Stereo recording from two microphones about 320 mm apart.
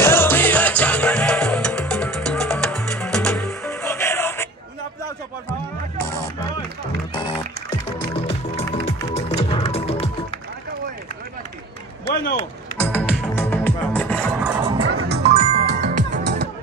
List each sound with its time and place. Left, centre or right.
0.0 s music: centre
8.5 s music: centre
12.1 s a sound: left
12.7 s music: centre
14.8 s music: right
15.3 s music: centre
15.8 s music: right